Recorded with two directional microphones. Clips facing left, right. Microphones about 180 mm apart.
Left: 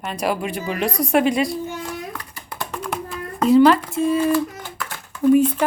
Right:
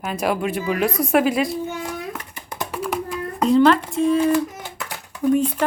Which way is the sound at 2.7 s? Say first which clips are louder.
Right 4 dB; 5° right (ahead or behind).